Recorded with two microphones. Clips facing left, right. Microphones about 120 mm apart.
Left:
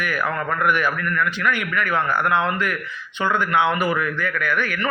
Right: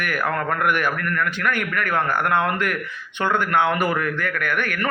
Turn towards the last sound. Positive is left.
turn(degrees=-55)  # may be behind; listen again after turning